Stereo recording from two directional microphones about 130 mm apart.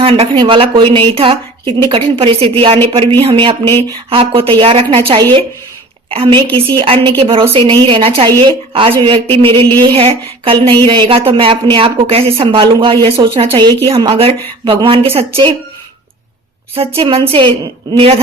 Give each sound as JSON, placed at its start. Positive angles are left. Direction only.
{"t": 0.0, "sound": "a woman's voice", "side_deg": -45}
{"t": 17.0, "sound": "a woman's voice", "side_deg": -45}